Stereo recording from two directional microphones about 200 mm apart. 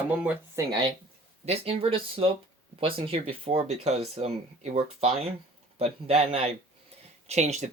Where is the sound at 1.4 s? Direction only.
30° right (ahead or behind).